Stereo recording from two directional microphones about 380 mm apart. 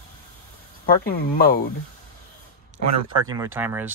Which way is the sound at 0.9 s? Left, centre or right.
Left.